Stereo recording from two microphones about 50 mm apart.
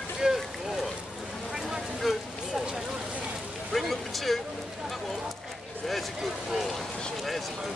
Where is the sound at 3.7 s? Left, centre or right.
Centre.